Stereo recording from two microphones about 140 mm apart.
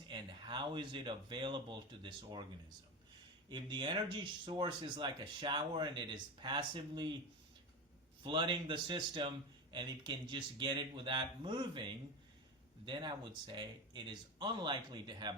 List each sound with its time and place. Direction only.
0.1 s speech: 35° right (ahead or behind)
3.5 s speech: 35° right (ahead or behind)
8.2 s speech: 35° right (ahead or behind)